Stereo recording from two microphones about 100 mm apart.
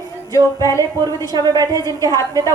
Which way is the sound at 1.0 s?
40° right (ahead or behind).